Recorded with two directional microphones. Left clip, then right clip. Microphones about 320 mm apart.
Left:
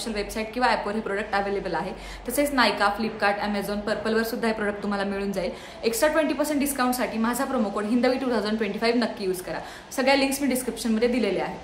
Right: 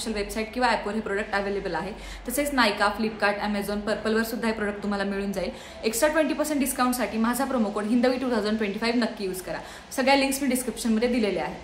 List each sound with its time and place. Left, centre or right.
0.1 s a woman's voice: centre